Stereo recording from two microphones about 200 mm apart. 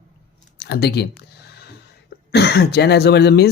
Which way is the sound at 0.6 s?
55° left (ahead or behind).